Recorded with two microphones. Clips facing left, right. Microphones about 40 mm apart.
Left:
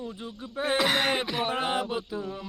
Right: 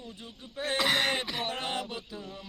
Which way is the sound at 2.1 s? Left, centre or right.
Left.